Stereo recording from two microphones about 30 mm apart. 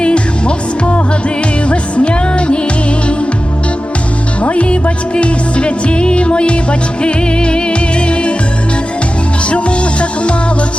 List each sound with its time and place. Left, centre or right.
0.0 s music: left
4.4 s music: left
9.5 s music: left